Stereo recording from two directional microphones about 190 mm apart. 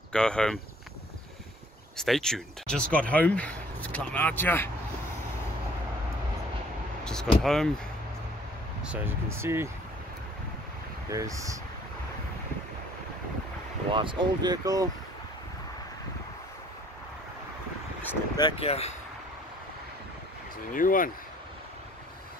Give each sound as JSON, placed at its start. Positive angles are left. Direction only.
{"t": 0.1, "sound": "speech", "side_deg": 5}
{"t": 2.0, "sound": "speech", "side_deg": 0}
{"t": 7.1, "sound": "speech", "side_deg": 5}
{"t": 8.8, "sound": "speech", "side_deg": -10}
{"t": 11.1, "sound": "speech", "side_deg": -15}
{"t": 13.9, "sound": "speech", "side_deg": -25}
{"t": 18.4, "sound": "speech", "side_deg": 30}
{"t": 20.7, "sound": "speech", "side_deg": 45}